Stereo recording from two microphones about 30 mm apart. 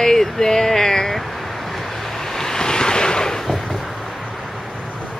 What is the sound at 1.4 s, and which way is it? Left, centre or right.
Waves, centre.